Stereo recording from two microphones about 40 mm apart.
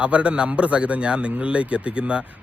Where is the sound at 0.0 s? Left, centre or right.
Right.